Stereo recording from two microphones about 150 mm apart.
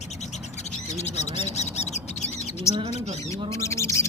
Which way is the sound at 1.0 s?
50° left (ahead or behind).